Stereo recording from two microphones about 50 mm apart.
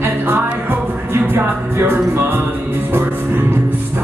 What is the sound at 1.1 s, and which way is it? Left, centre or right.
Music, right.